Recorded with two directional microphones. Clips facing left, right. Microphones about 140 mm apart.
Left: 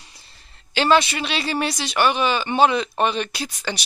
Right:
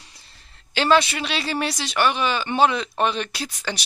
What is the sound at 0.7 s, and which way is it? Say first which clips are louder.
Speech: left 1 dB; centre (ahead or behind).